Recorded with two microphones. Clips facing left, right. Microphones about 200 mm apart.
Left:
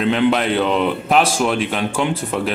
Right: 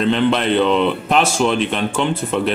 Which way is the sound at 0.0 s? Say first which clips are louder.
Even; 5° left (ahead or behind).